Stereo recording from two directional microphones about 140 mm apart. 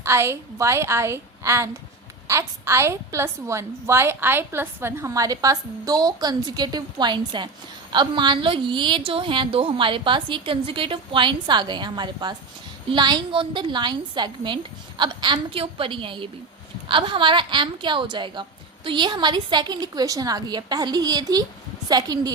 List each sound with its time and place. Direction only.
0.0 s a woman's voice: 20° right (ahead or behind)